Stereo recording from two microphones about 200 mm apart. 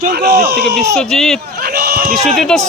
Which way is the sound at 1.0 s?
Centre (ahead or behind).